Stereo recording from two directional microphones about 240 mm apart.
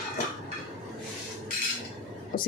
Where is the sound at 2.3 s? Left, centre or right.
Left.